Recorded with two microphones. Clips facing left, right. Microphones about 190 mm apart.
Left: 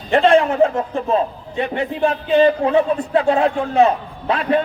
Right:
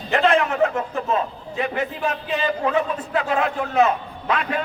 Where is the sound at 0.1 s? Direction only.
30° left (ahead or behind).